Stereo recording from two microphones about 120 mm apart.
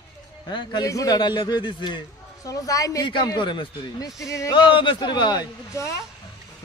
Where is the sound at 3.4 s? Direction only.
40° left (ahead or behind).